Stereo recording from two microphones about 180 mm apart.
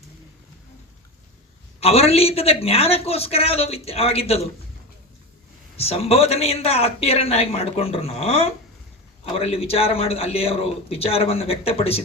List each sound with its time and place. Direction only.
1.8 s a man's voice: 35° left (ahead or behind)
5.7 s a man's voice: 35° left (ahead or behind)